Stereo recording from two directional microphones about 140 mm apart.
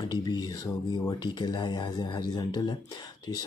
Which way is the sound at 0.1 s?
30° left (ahead or behind).